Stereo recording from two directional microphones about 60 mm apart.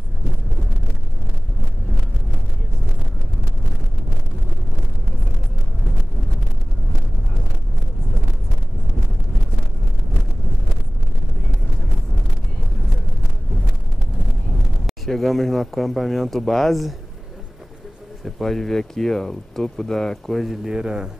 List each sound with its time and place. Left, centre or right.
14.9 s speech: centre
18.2 s speech: centre
20.6 s speech: centre